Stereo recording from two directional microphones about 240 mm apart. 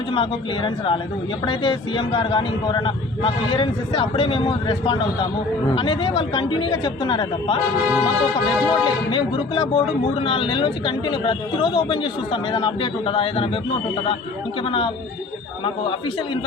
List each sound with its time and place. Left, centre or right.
0.1 s a man's voice: left
14.6 s a man's voice: left